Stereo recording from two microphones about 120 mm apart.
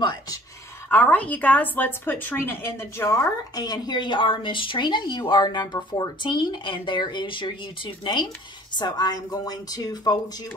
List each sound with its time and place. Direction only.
0.0 s a sound: 35° left (ahead or behind)
0.8 s a woman's voice: 15° left (ahead or behind)
3.5 s speech: 35° left (ahead or behind)